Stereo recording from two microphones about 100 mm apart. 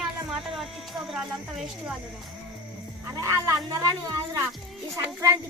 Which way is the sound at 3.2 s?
40° right (ahead or behind).